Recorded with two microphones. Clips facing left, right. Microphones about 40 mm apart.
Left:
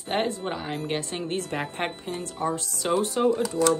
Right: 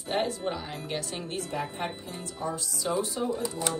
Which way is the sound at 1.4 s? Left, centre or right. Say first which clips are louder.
Left 3 dB; left.